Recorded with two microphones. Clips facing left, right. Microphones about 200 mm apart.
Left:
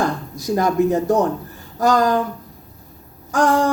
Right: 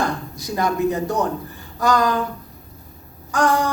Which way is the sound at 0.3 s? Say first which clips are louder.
Left 5 dB; 45° left (ahead or behind).